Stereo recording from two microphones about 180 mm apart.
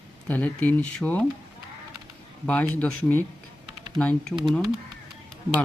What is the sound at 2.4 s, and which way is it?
Speech, 5° left (ahead or behind).